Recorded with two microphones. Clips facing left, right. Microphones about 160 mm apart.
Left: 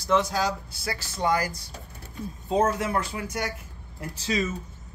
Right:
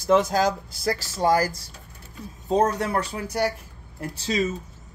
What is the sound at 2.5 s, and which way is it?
Speech, 40° right (ahead or behind).